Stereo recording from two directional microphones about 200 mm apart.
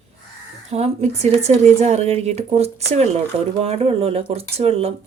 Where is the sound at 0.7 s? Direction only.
30° right (ahead or behind).